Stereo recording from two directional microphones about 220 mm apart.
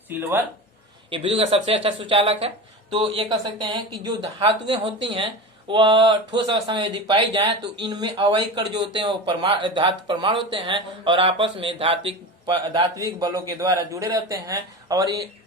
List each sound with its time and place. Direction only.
0.1 s speech: 10° right (ahead or behind)
1.1 s speech: 25° right (ahead or behind)